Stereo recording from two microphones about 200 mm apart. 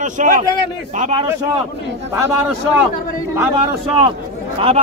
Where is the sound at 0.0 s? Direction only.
40° right (ahead or behind).